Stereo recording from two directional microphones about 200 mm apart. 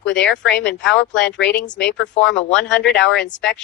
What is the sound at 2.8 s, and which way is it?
Speech, 60° left (ahead or behind).